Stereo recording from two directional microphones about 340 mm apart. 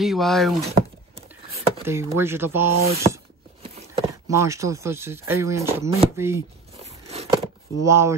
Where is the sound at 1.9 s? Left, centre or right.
Centre.